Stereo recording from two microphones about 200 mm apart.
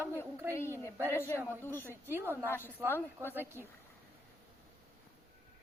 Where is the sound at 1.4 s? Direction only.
10° right (ahead or behind).